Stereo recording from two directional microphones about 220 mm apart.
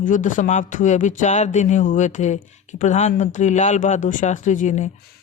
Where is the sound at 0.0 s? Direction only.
35° left (ahead or behind).